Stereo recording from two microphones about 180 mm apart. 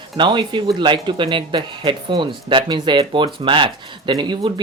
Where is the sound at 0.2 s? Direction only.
25° right (ahead or behind).